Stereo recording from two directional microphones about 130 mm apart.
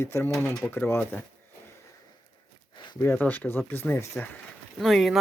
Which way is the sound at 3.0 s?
15° left (ahead or behind).